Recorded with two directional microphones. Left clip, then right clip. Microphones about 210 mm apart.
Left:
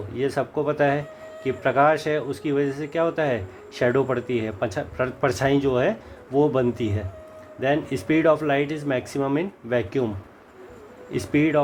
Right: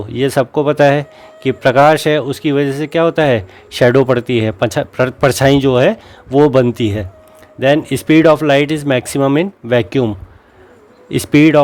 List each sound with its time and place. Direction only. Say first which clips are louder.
0.1 s speech: right 11 dB; 55° right (ahead or behind)
11.1 s speech: right 12 dB; 55° right (ahead or behind)